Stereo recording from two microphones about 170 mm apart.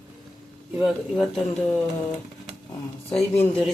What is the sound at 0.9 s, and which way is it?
Speech, 5° left (ahead or behind).